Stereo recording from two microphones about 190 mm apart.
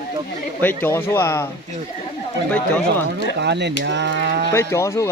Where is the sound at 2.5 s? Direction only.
10° left (ahead or behind).